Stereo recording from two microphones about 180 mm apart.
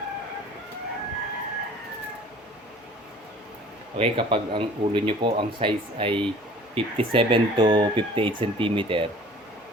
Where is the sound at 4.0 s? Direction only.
30° right (ahead or behind).